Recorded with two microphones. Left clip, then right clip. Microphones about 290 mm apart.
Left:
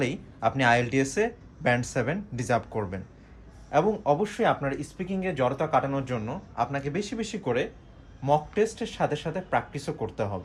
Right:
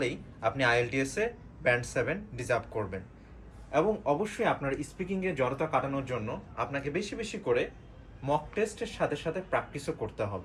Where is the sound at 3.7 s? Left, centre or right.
Left.